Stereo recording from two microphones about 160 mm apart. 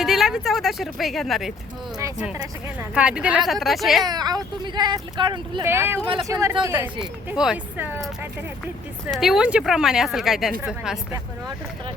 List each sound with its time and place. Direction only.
0.0 s a woman's voice: centre (ahead or behind)
2.9 s a woman's voice: 5° right (ahead or behind)
4.0 s speech: 25° right (ahead or behind)
5.6 s speech: 15° right (ahead or behind)
9.1 s a woman's voice: centre (ahead or behind)